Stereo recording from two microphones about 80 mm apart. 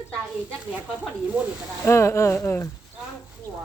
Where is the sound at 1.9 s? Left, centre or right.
Left.